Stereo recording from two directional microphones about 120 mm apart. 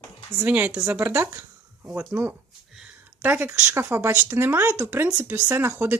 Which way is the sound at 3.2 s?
15° right (ahead or behind).